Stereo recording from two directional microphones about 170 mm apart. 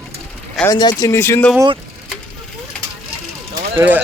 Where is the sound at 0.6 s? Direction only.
25° left (ahead or behind).